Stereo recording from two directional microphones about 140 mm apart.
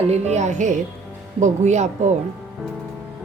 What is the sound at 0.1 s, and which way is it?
A woman's voice, 55° right (ahead or behind).